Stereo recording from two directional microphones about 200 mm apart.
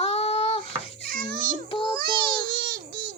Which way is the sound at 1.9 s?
50° right (ahead or behind).